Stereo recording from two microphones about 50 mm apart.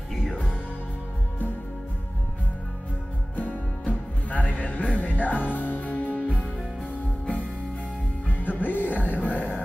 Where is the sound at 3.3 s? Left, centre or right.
Left.